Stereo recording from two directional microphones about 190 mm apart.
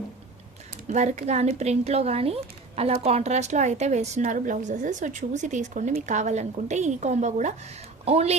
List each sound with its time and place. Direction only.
0.9 s a woman's voice: 40° right (ahead or behind)